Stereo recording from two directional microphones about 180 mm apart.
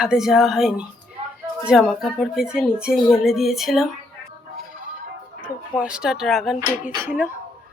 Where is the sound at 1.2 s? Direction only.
30° right (ahead or behind).